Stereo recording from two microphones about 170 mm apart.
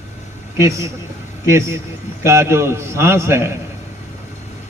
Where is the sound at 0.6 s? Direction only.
15° right (ahead or behind).